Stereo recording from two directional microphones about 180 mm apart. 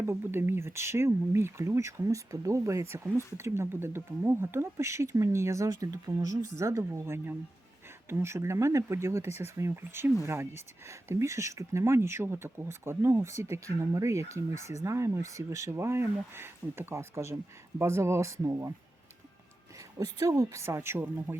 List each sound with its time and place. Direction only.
0.0 s speech: 15° right (ahead or behind)
20.0 s speech: 20° right (ahead or behind)